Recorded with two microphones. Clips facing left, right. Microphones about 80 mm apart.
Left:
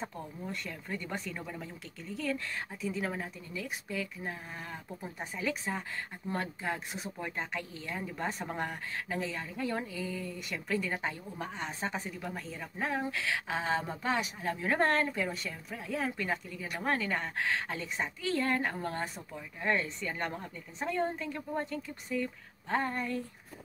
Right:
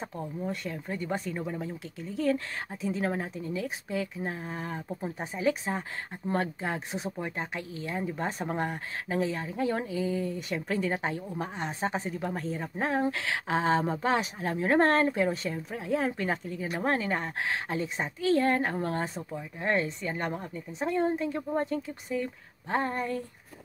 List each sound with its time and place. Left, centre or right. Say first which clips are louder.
0.5 s speech: right 5 dB; right
19.1 s speech: right 6 dB; right